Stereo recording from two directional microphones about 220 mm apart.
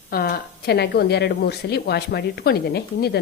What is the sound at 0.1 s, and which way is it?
Speech, 45° left (ahead or behind).